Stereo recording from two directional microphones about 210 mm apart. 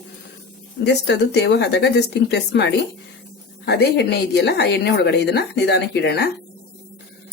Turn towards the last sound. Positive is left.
turn(degrees=55)  # may be behind; listen again after turning